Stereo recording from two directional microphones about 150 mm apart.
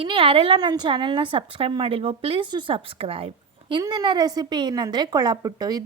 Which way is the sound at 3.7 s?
30° right (ahead or behind).